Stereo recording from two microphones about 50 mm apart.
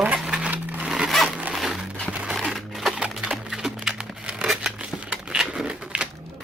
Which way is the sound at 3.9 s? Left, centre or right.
Right.